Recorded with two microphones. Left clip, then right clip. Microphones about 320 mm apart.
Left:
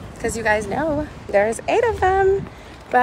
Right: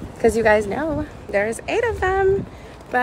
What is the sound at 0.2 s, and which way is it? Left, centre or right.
Speech, right.